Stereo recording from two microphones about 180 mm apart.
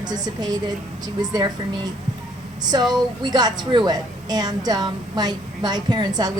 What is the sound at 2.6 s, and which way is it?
A woman's voice, 20° right (ahead or behind).